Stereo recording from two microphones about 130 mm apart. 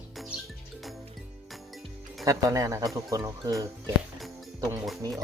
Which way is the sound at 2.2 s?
25° right (ahead or behind).